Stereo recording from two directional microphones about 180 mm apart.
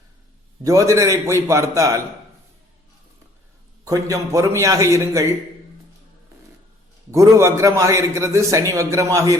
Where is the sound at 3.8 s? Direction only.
20° right (ahead or behind).